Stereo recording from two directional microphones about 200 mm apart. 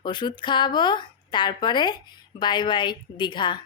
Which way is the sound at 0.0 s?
25° left (ahead or behind).